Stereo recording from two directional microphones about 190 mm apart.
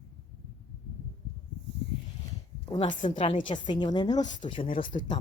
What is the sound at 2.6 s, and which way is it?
A woman's voice, 25° left (ahead or behind).